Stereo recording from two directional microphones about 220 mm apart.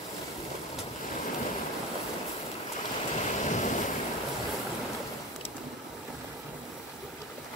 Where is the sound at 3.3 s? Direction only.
35° left (ahead or behind).